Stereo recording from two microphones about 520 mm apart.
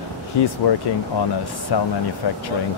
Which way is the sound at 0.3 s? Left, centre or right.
Left.